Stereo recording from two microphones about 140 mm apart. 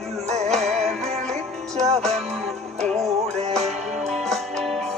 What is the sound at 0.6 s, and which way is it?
Music, 50° right (ahead or behind).